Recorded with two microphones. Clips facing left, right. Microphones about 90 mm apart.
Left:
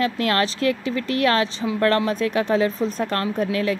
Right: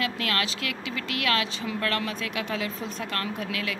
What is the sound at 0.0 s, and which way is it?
Speech, 40° left (ahead or behind).